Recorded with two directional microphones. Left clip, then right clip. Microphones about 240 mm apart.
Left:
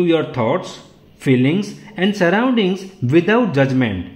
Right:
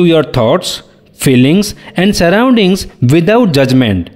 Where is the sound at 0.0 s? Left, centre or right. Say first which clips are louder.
Right 8 dB; right.